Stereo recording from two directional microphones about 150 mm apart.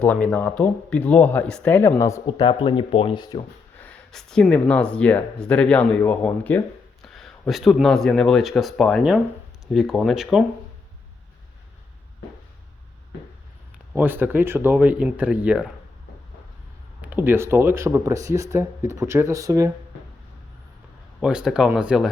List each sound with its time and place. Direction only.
0.0 s speech: 5° left (ahead or behind)
2.2 s speech: 30° left (ahead or behind)
3.8 s speech: 10° left (ahead or behind)
13.9 s speech: 15° right (ahead or behind)
17.0 s speech: 10° right (ahead or behind)
21.2 s speech: 5° right (ahead or behind)